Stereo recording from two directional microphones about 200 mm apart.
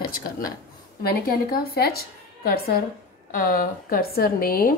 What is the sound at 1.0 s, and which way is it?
A woman's voice, 50° left (ahead or behind).